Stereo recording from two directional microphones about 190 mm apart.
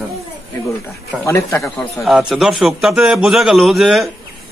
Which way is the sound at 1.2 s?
15° left (ahead or behind).